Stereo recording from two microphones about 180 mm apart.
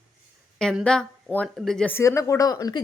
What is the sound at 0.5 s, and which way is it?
Speech, 5° left (ahead or behind).